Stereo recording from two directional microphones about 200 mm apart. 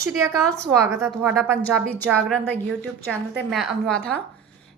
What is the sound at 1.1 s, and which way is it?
A woman's voice, 5° left (ahead or behind).